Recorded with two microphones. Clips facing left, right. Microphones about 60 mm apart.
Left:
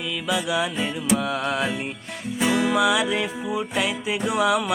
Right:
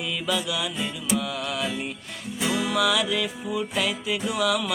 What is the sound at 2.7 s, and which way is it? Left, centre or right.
Music, left.